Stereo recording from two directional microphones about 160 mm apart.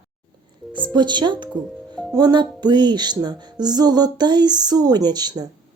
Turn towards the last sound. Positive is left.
turn(degrees=-25)  # may be behind; listen again after turning